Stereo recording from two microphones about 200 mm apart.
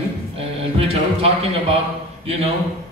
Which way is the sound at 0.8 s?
30° right (ahead or behind).